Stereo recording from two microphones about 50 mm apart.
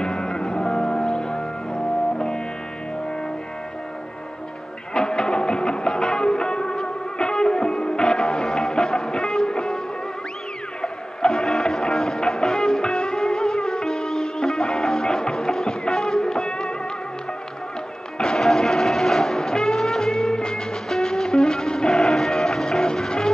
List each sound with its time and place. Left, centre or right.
0.0 s music: centre
1.0 s music: centre
4.9 s music: centre
10.8 s music: centre
18.1 s music: centre